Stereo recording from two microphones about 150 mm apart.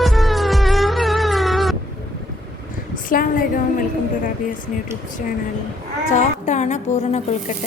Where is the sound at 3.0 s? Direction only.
70° left (ahead or behind).